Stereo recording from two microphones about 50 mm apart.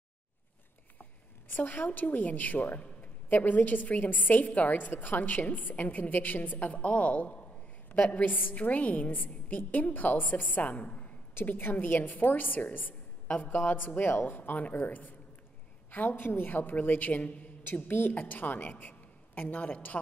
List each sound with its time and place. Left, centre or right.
1.6 s a woman's voice: left
8.2 s a woman's voice: left
11.4 s a woman's voice: left